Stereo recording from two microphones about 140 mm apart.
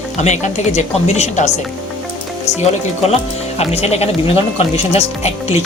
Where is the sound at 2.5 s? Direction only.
50° left (ahead or behind).